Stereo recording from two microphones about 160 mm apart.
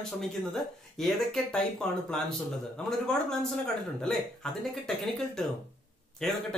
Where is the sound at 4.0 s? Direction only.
Centre (ahead or behind).